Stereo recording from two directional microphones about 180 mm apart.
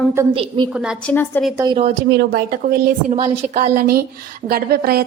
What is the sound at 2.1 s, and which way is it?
Speech, 70° right (ahead or behind).